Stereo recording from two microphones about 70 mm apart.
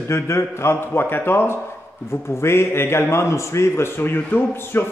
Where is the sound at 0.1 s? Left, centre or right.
Left.